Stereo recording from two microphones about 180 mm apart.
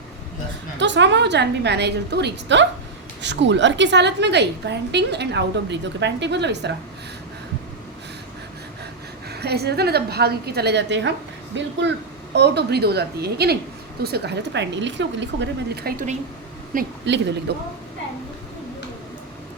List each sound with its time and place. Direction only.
0.8 s a woman's voice: 85° right
9.3 s a woman's voice: 65° right (ahead or behind)
16.7 s speech: 50° right (ahead or behind)
17.5 s speech: 65° right (ahead or behind)